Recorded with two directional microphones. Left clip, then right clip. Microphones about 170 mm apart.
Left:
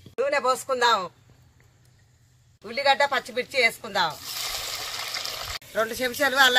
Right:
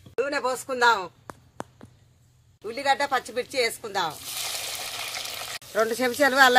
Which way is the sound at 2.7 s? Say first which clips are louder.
Left 2 dB; 30° right (ahead or behind).